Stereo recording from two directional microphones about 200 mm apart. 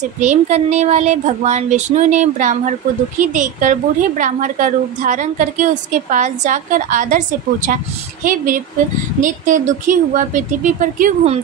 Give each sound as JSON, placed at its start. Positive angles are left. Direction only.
{"t": 0.2, "sound": "a woman's voice", "side_deg": -35}